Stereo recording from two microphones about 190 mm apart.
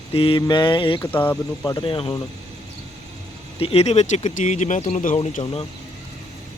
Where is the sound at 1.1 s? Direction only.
10° left (ahead or behind).